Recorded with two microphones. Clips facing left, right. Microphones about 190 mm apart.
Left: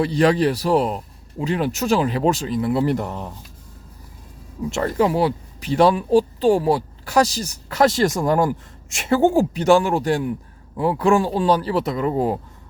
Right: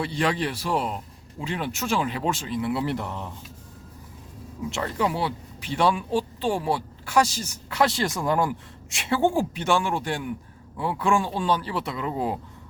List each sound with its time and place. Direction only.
0.0 s speech: 40° left (ahead or behind)
4.7 s speech: 40° left (ahead or behind)